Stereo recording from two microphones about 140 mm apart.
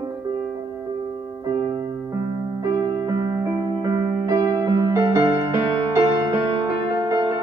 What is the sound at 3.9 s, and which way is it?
Music, 25° right (ahead or behind).